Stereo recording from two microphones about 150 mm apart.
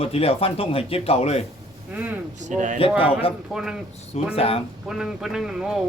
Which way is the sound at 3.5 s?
5° right (ahead or behind).